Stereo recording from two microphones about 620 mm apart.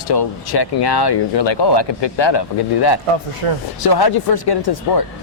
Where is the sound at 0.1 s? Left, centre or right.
Left.